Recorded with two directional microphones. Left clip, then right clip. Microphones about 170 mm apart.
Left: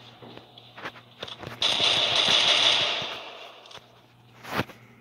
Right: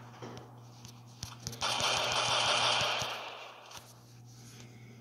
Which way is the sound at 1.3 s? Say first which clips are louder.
Left 9 dB; 20° left (ahead or behind).